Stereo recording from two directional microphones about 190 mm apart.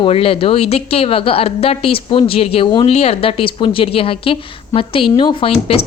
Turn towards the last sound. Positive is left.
turn(degrees=30)  # may be behind; listen again after turning